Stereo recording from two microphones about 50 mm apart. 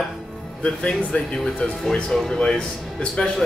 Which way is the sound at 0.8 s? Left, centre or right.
Centre.